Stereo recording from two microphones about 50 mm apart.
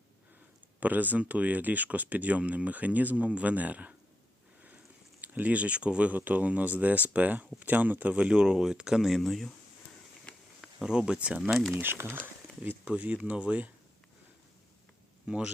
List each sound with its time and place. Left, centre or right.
0.8 s speech: right
5.2 s speech: right; by 9.0 s centre
9.0 s speech: centre
10.3 s insect: left
10.6 s speech: centre
11.7 s speech: right
12.2 s a sound: right
12.8 s speech: right
15.3 s speech: centre